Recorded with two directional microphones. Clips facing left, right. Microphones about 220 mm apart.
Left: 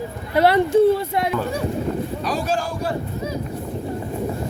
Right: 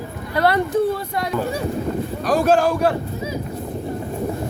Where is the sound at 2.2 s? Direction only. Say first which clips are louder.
Right 11 dB; 50° right (ahead or behind).